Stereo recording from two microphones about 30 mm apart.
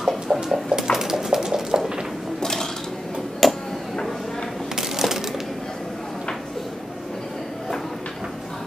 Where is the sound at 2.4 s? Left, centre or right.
Centre.